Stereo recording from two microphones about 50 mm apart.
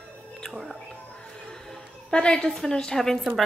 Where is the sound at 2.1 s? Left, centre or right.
Centre.